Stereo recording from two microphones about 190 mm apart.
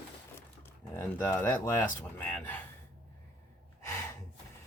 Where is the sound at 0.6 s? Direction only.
10° left (ahead or behind).